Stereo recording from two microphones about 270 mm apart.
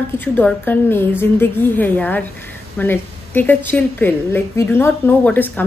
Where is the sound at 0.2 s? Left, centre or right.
Centre.